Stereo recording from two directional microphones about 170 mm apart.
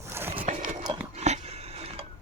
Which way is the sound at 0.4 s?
50° right (ahead or behind).